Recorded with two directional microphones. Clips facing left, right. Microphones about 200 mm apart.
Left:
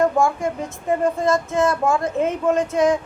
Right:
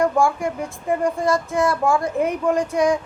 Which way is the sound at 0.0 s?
20° left (ahead or behind).